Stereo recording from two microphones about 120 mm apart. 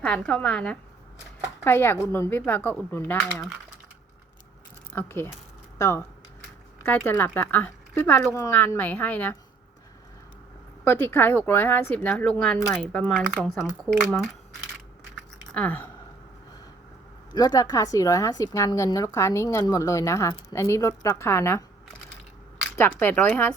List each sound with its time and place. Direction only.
0.0 s speech: 5° left (ahead or behind)
1.6 s speech: 20° left (ahead or behind)
2.4 s speech: 10° left (ahead or behind)
4.9 s speech: 20° left (ahead or behind)
10.8 s speech: 20° left (ahead or behind)
15.5 s speech: 15° left (ahead or behind)
17.3 s speech: 30° left (ahead or behind)
22.7 s speech: 15° left (ahead or behind)